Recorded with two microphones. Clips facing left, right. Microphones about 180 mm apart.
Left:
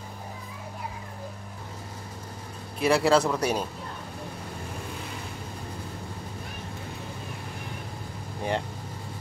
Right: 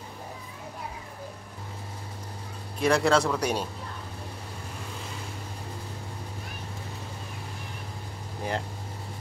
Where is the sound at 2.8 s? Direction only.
5° left (ahead or behind).